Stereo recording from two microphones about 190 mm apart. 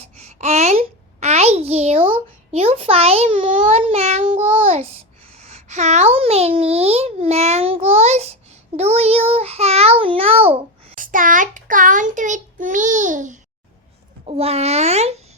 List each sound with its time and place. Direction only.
0.2 s a sound: 35° right (ahead or behind)
3.6 s child singing: 30° right (ahead or behind)
5.4 s a sound: 35° right (ahead or behind)
8.7 s child singing: 35° right (ahead or behind)
10.9 s child singing: 45° right (ahead or behind)
14.3 s a child's voice: 30° right (ahead or behind)